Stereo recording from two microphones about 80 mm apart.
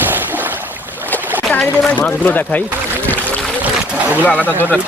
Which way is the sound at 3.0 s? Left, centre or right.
Left.